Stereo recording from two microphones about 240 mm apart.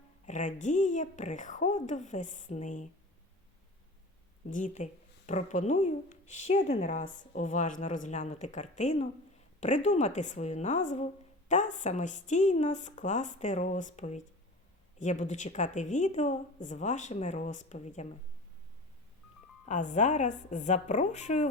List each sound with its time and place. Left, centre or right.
0.3 s speech: left
4.4 s a woman's voice: left
19.6 s a woman's voice: left